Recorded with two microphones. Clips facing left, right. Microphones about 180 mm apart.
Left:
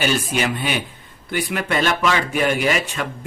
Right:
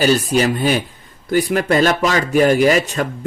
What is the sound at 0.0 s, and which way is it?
Speech, 35° right (ahead or behind).